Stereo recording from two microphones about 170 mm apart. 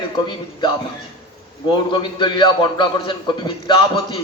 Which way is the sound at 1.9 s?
25° left (ahead or behind).